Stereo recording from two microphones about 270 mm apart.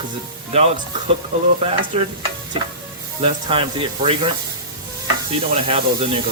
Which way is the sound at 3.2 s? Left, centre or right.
Centre.